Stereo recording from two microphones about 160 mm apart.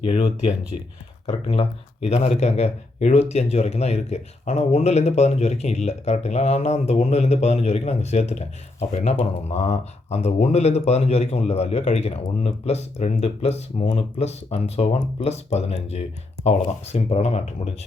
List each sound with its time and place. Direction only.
0.0 s speech: 35° left (ahead or behind)